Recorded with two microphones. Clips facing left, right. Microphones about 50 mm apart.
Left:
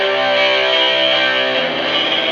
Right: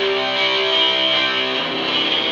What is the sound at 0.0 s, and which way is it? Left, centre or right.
Music, left.